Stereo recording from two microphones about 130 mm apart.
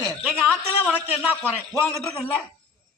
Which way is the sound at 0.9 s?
10° right (ahead or behind).